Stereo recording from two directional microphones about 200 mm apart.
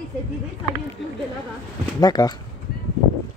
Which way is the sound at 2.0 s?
20° left (ahead or behind).